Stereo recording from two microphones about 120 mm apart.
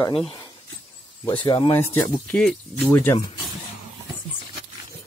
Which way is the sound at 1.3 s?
45° left (ahead or behind).